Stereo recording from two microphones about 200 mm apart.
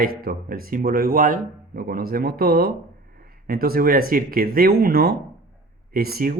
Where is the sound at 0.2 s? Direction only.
45° right (ahead or behind).